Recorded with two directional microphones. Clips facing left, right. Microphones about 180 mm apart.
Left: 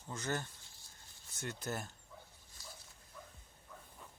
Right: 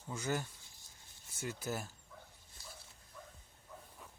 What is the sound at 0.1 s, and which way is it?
Speech, 10° right (ahead or behind).